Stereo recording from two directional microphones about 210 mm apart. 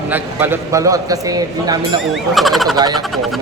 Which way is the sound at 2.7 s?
20° right (ahead or behind).